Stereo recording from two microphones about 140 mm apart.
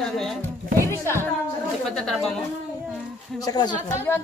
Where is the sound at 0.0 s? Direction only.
5° left (ahead or behind).